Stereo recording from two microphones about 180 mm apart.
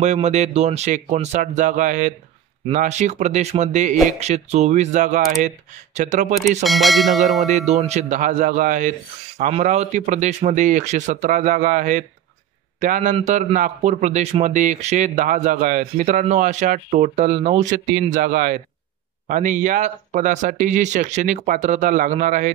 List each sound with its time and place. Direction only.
0.0 s a man's voice: 40° right (ahead or behind)
6.6 s speech: centre (ahead or behind)
7.4 s a man's voice: 40° right (ahead or behind)